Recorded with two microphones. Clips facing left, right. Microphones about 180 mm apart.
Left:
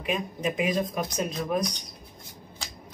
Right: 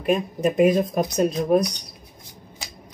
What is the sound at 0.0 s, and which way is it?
Speech, 45° right (ahead or behind).